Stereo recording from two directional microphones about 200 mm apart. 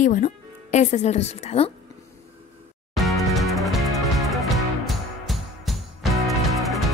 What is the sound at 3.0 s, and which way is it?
Music, centre (ahead or behind).